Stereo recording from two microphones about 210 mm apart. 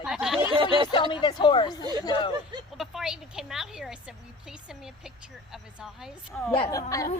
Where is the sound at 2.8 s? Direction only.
Centre (ahead or behind).